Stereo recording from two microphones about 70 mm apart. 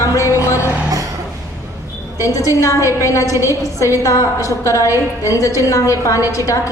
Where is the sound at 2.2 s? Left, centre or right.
Left.